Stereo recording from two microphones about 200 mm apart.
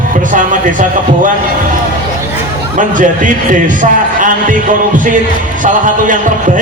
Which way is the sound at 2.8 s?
40° right (ahead or behind).